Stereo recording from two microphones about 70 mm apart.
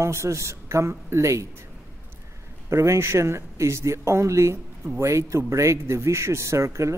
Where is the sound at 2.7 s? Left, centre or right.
Right.